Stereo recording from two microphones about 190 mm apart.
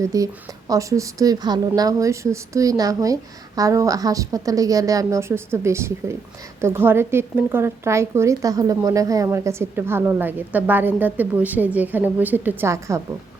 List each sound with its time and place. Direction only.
0.0 s a woman's voice: 15° right (ahead or behind)